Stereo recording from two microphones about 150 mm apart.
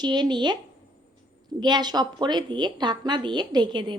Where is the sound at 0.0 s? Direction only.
30° right (ahead or behind).